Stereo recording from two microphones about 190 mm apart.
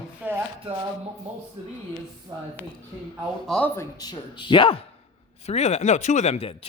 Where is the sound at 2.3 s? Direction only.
20° right (ahead or behind).